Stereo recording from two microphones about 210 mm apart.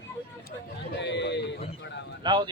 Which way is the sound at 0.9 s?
55° left (ahead or behind).